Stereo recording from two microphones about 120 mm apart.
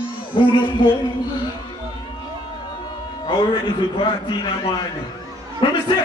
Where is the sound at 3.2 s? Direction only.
45° left (ahead or behind).